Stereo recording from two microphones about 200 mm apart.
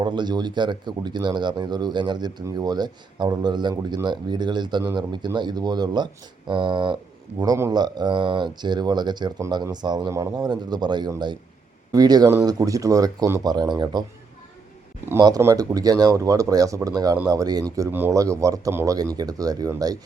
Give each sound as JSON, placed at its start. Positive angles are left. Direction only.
{"t": 0.0, "sound": "speech", "side_deg": -20}
{"t": 15.0, "sound": "speech", "side_deg": -15}